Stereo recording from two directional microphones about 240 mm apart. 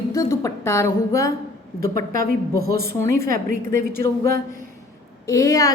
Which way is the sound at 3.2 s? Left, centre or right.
Right.